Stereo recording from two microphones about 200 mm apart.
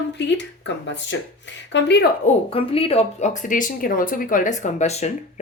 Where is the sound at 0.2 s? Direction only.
60° left (ahead or behind).